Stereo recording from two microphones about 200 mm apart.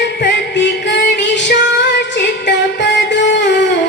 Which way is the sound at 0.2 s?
60° left (ahead or behind).